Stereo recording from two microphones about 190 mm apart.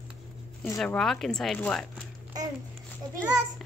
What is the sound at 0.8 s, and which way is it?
Speech, centre (ahead or behind).